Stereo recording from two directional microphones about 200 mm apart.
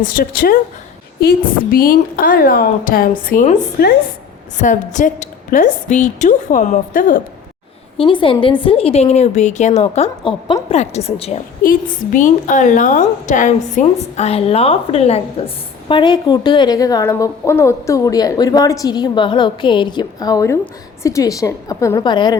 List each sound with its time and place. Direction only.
0.0 s a woman's voice: 45° left (ahead or behind)
7.9 s a woman's voice: 25° left (ahead or behind)
11.6 s a woman's voice: 45° left (ahead or behind); by 22.4 s 20° left (ahead or behind)